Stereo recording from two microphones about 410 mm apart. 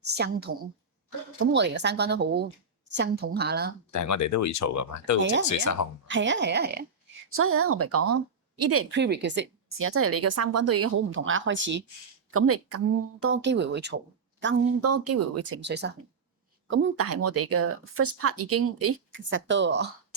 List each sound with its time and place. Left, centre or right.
0.0 s speech: right
1.5 s speech: right
3.9 s speech: left
6.1 s speech: right
14.4 s speech: right